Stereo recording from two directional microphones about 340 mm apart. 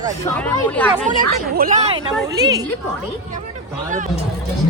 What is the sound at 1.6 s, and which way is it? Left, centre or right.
A woman's voice, centre.